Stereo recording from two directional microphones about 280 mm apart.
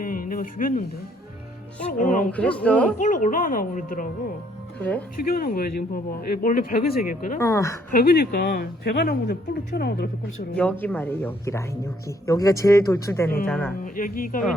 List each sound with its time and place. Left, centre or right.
0.0 s a sound: left
1.9 s speech: left
2.3 s a man's voice: centre
3.0 s speech: left
4.8 s a man's voice: centre
5.3 s speech: left
7.3 s a woman's voice: centre
7.9 s speech: left
10.5 s a woman's voice: centre
13.8 s speech: left